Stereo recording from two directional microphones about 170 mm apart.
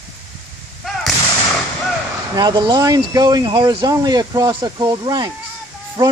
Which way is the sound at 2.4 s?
25° right (ahead or behind).